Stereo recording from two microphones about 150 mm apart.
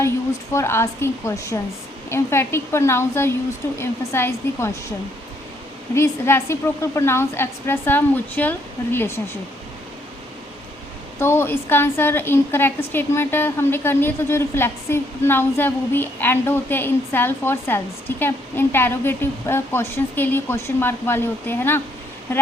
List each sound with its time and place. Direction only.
0.5 s a woman's voice: 15° left (ahead or behind)
11.2 s a woman's voice: 15° left (ahead or behind)